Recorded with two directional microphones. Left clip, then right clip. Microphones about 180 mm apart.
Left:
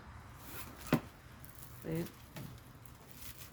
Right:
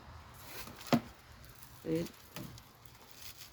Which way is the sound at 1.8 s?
15° left (ahead or behind).